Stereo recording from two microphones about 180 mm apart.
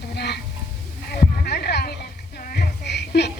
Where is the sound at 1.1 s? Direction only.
60° left (ahead or behind).